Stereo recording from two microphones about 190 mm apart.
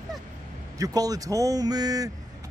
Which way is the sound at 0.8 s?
20° right (ahead or behind).